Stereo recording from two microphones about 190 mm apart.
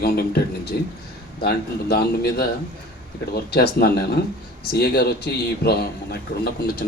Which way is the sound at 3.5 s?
55° left (ahead or behind).